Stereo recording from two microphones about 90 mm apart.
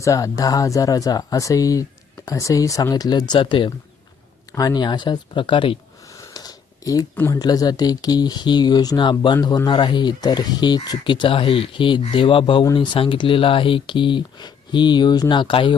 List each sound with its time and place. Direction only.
0.0 s speech: 40° left (ahead or behind)
3.4 s speech: 65° left (ahead or behind)
4.5 s speech: 50° left (ahead or behind); by 5.8 s 75° left (ahead or behind)
6.1 s sniff: 45° left (ahead or behind)
7.3 s speech: 45° left (ahead or behind); by 12.6 s 75° left (ahead or behind)
12.7 s speech: 65° left (ahead or behind)